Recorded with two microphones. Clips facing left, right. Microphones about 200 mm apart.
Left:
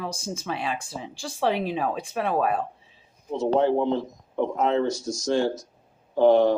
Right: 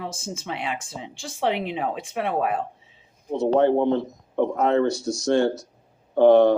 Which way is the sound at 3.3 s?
60° right (ahead or behind).